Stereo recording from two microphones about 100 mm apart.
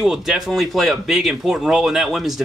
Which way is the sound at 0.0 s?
5° right (ahead or behind).